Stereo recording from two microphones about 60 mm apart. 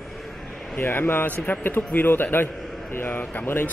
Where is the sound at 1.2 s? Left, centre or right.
Left.